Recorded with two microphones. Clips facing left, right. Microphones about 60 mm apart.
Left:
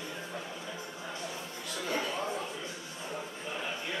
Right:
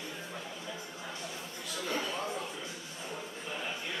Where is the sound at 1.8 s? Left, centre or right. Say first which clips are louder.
Left 2 dB; centre.